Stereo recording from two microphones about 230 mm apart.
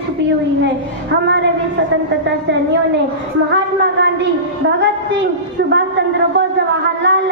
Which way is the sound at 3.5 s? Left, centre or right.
Right.